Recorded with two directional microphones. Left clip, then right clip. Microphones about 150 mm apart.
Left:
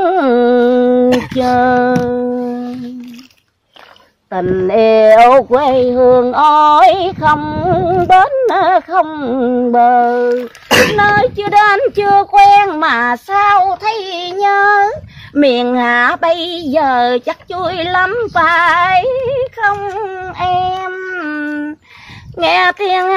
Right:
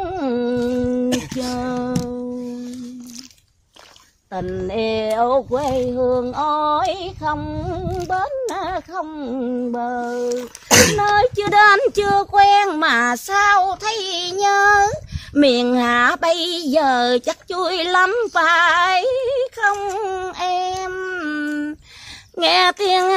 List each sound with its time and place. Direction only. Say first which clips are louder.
0.0 s humming: left 12 dB; 55° left (ahead or behind)
1.4 s female singing: left 14 dB; 55° left (ahead or behind)
2.0 s music: left 12 dB; 60° left (ahead or behind)
4.3 s a sound: left 11 dB; 40° left (ahead or behind)
4.7 s speech: left 14 dB; 55° left (ahead or behind)
10.7 s a sound: left 4 dB; 40° right (ahead or behind)
11.0 s speech: left 6 dB; 30° right (ahead or behind)
11.3 s speech: left 3 dB; 90° right
11.9 s child singing: left 7 dB; 20° right (ahead or behind); by 23.1 s 45° right (ahead or behind)